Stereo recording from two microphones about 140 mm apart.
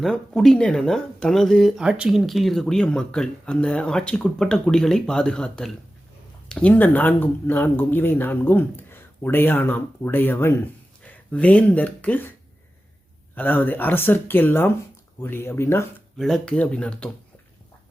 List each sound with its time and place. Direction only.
0.0 s speech: 5° left (ahead or behind)
13.3 s speech: 15° left (ahead or behind)
16.1 s speech: centre (ahead or behind)